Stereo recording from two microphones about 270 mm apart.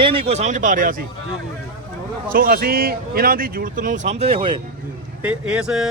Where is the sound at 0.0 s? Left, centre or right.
Centre.